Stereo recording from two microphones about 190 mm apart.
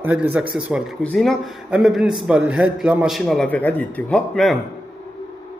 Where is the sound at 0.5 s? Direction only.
Centre (ahead or behind).